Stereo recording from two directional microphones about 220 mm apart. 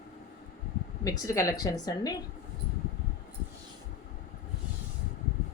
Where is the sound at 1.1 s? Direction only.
15° left (ahead or behind).